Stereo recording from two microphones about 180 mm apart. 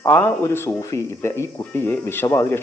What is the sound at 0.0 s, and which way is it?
Speech, 15° left (ahead or behind).